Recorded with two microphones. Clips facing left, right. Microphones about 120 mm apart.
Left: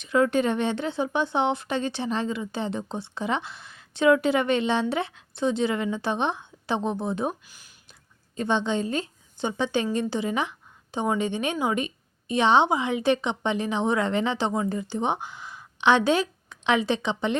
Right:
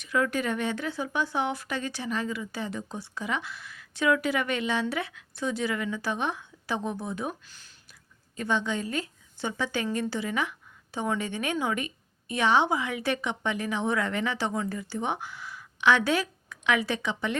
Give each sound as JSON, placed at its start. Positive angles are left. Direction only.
{"t": 0.0, "sound": "speech", "side_deg": 25}
{"t": 7.4, "sound": "speech", "side_deg": 10}
{"t": 8.4, "sound": "speech", "side_deg": 25}